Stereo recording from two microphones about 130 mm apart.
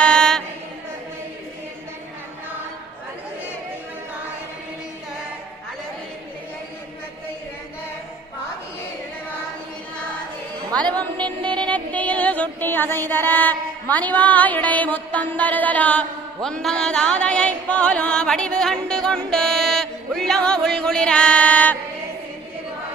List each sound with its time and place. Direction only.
0.0 s chant: 5° left (ahead or behind)
10.7 s music: 10° left (ahead or behind)